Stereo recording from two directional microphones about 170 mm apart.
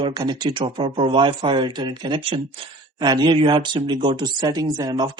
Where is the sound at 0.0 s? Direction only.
25° right (ahead or behind).